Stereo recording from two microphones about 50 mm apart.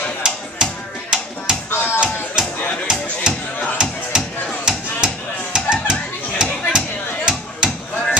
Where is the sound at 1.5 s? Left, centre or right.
Centre.